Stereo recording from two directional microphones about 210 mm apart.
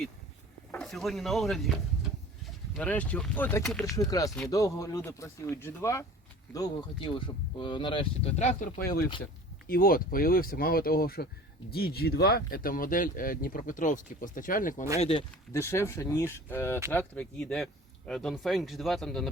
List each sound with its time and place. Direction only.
0.7 s speech: centre (ahead or behind)
3.8 s speech: 15° left (ahead or behind); by 14.8 s 40° left (ahead or behind)
14.9 s speech: 30° left (ahead or behind)
15.5 s speech: 10° left (ahead or behind)